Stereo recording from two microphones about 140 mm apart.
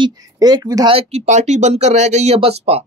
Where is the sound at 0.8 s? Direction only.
45° right (ahead or behind).